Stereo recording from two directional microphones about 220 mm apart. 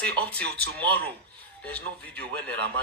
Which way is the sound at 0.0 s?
5° left (ahead or behind).